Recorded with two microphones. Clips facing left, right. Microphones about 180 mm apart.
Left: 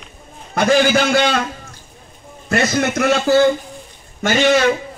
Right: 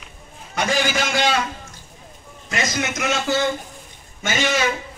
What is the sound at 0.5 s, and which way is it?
Speech, 60° left (ahead or behind).